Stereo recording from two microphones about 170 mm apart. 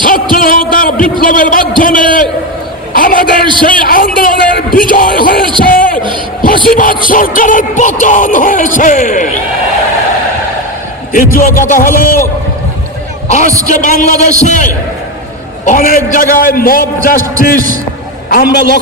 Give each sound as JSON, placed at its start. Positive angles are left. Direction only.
{"t": 0.0, "sound": "a sound", "side_deg": 55}
{"t": 5.7, "sound": "a man's voice", "side_deg": 55}
{"t": 11.1, "sound": "a man's voice", "side_deg": 55}
{"t": 13.7, "sound": "a man's voice", "side_deg": 50}